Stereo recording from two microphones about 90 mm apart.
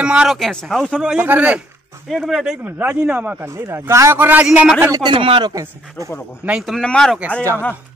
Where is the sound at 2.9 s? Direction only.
15° right (ahead or behind).